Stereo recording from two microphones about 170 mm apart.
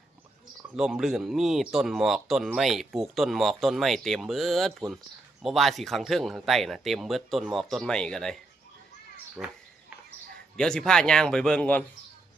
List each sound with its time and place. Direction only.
0.8 s speech: centre (ahead or behind)
9.4 s speech: centre (ahead or behind)
10.6 s speech: 5° left (ahead or behind)